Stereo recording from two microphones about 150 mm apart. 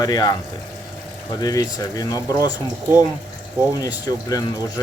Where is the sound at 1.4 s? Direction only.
25° left (ahead or behind).